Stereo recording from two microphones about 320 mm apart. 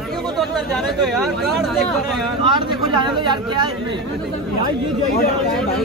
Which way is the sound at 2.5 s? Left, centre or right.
Centre.